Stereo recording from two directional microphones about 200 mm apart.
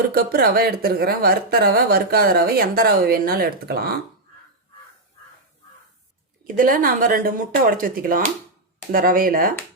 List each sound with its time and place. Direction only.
0.1 s speech: 50° right (ahead or behind)
6.4 s speech: 45° right (ahead or behind)